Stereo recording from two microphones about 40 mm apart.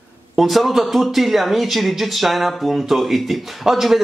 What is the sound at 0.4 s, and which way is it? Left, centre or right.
Speech, centre.